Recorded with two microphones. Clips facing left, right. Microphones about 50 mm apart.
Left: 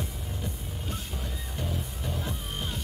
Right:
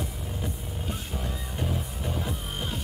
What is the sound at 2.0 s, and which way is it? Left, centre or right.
Music, centre.